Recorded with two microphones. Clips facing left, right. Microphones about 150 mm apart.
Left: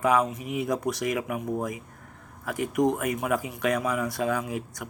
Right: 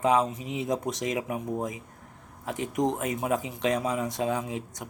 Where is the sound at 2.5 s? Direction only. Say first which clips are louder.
Left 3 dB; 25° right (ahead or behind).